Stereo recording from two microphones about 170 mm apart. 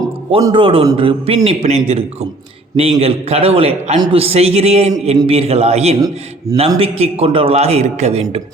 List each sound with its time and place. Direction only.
0.0 s a man's voice: 25° right (ahead or behind)